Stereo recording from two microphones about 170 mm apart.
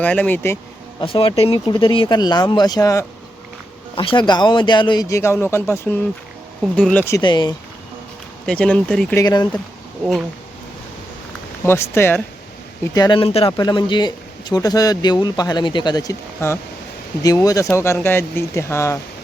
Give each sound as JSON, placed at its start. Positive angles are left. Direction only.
{"t": 0.0, "sound": "speech", "side_deg": 10}
{"t": 1.0, "sound": "speech", "side_deg": 35}
{"t": 3.9, "sound": "speech", "side_deg": 30}
{"t": 7.2, "sound": "speech", "side_deg": 25}
{"t": 8.4, "sound": "speech", "side_deg": 5}
{"t": 9.1, "sound": "speech", "side_deg": 25}
{"t": 11.6, "sound": "speech", "side_deg": 15}
{"t": 12.9, "sound": "speech", "side_deg": 25}